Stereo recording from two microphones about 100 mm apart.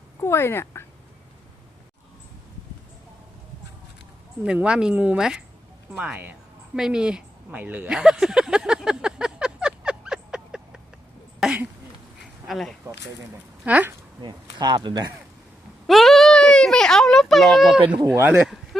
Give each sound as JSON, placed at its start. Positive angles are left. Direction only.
{"t": 0.2, "sound": "speech", "side_deg": 25}
{"t": 4.4, "sound": "speech", "side_deg": -10}
{"t": 7.9, "sound": "a sound", "side_deg": -5}
{"t": 12.5, "sound": "speech", "side_deg": 0}
{"t": 13.7, "sound": "speech", "side_deg": -15}
{"t": 14.2, "sound": "speech", "side_deg": -45}
{"t": 15.9, "sound": "a child's voice", "side_deg": 0}
{"t": 18.1, "sound": "speech", "side_deg": -15}
{"t": 18.4, "sound": "a sound", "side_deg": 0}